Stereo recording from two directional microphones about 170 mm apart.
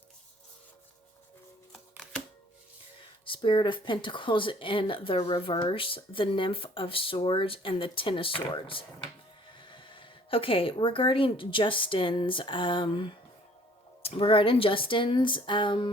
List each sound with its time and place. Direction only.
1.7 s music: centre (ahead or behind)
3.2 s speech: 30° left (ahead or behind)